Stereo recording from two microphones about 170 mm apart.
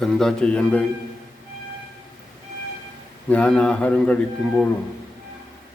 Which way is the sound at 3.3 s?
5° left (ahead or behind).